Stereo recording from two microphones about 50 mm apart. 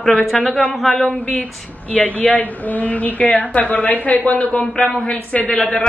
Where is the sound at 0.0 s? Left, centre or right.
Centre.